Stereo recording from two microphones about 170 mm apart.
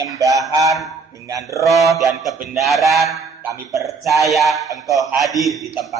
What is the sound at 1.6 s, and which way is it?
Music, centre (ahead or behind).